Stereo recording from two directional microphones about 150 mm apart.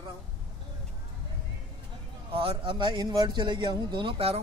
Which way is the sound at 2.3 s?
35° right (ahead or behind).